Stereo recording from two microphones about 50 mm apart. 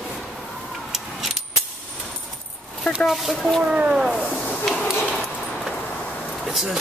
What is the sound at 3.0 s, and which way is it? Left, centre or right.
Speech, centre.